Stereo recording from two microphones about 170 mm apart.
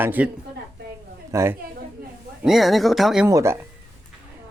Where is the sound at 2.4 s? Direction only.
Centre (ahead or behind).